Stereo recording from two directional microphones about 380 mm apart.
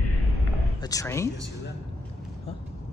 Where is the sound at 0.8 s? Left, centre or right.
Centre.